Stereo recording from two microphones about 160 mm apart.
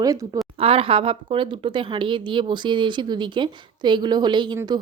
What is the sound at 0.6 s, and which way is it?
Speech, 35° right (ahead or behind).